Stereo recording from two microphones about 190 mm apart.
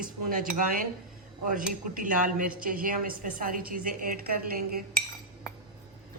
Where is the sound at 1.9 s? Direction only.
45° right (ahead or behind).